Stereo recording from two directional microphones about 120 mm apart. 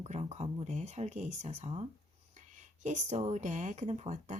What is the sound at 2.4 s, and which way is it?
Speech, 90° right.